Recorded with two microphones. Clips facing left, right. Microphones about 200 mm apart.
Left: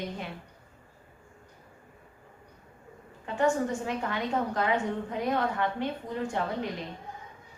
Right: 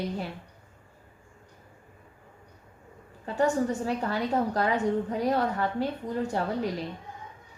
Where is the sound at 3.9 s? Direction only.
35° right (ahead or behind).